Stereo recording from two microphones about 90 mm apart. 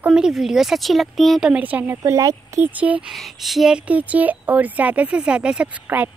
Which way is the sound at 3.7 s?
15° right (ahead or behind).